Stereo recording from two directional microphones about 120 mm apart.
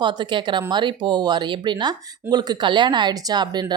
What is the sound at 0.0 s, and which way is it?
Speech, 40° right (ahead or behind).